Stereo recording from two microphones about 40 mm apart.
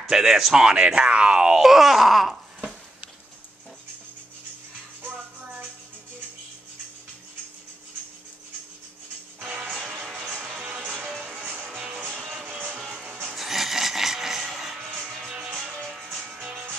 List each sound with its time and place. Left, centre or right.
0.0 s speech: centre
1.6 s groan: centre
10.1 s music: centre
11.4 s music: right
12.2 s music: centre
12.9 s music: right
13.3 s music: centre